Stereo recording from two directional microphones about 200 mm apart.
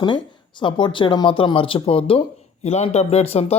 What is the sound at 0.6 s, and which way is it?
Speech, 25° left (ahead or behind).